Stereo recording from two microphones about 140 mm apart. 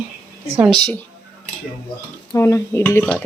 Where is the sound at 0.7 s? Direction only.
30° right (ahead or behind).